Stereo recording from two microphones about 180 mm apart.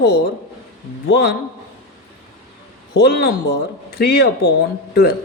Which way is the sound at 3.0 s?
65° left (ahead or behind).